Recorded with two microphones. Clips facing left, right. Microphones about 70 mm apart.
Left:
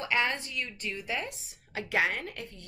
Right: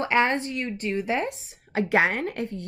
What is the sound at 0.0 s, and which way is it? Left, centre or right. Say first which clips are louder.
A woman's voice: right 7 dB; right.